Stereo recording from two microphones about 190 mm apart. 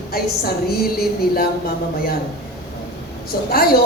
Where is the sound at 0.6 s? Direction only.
55° left (ahead or behind).